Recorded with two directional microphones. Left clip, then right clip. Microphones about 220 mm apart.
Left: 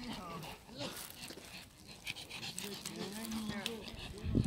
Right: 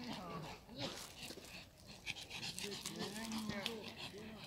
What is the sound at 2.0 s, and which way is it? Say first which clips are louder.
Dog: left 2 dB; 20° left (ahead or behind).